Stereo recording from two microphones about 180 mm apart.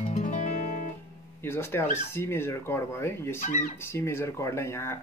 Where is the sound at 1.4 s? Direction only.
15° left (ahead or behind).